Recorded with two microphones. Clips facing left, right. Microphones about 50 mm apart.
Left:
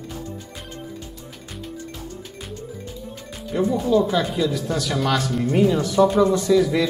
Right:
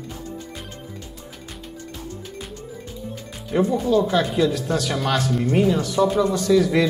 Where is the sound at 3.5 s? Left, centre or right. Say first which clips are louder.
Right 2 dB; right.